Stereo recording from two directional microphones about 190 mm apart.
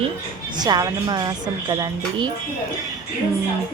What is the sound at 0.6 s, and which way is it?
A woman's voice, 20° right (ahead or behind).